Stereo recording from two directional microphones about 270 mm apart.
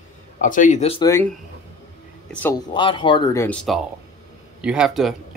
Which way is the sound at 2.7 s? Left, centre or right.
Centre.